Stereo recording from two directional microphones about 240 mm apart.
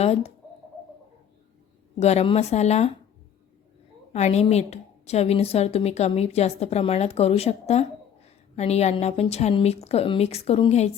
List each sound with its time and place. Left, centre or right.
0.0 s a woman's voice: left
2.0 s a woman's voice: left
4.1 s a woman's voice: left